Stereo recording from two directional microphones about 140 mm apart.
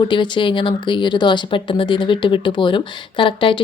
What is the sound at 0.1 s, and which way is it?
Speech, 35° left (ahead or behind).